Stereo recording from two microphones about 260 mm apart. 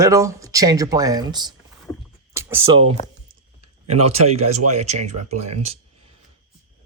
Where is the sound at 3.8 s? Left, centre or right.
Right.